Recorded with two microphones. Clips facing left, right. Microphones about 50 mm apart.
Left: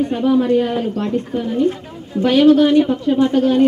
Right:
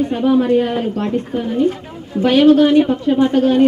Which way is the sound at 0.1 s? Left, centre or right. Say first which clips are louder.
Right 2 dB; right.